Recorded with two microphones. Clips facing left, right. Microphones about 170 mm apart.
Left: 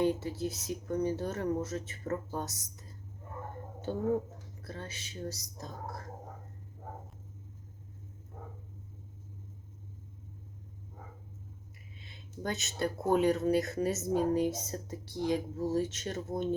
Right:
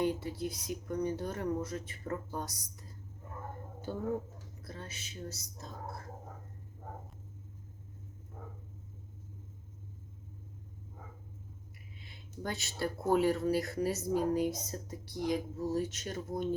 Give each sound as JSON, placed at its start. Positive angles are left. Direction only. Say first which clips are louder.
{"t": 0.0, "sound": "speech", "louder": "left 3 dB", "side_deg": 25}
{"t": 4.8, "sound": "speech", "louder": "left 4 dB", "side_deg": 30}
{"t": 11.9, "sound": "a sound", "louder": "left 2 dB", "side_deg": 25}
{"t": 12.5, "sound": "speech", "louder": "left 3 dB", "side_deg": 20}